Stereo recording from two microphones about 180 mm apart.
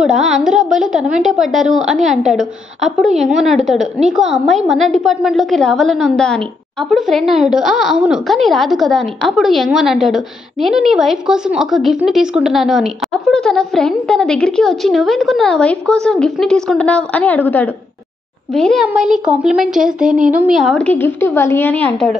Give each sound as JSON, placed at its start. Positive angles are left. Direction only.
{"t": 0.0, "sound": "a woman's voice", "side_deg": -5}
{"t": 20.1, "sound": "a woman's voice", "side_deg": -50}
{"t": 20.3, "sound": "a woman's voice", "side_deg": -5}